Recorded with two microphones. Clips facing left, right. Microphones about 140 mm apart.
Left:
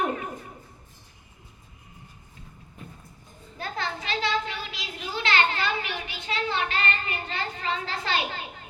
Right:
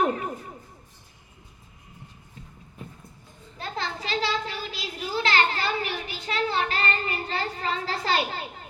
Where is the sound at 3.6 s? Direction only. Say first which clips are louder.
Even; 35° right (ahead or behind).